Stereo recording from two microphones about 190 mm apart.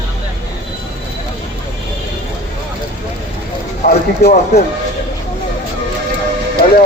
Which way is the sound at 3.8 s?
40° left (ahead or behind).